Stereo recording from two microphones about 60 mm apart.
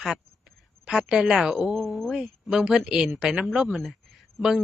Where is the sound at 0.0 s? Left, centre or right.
Centre.